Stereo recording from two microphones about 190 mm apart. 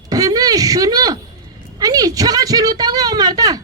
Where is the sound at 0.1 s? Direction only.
20° right (ahead or behind).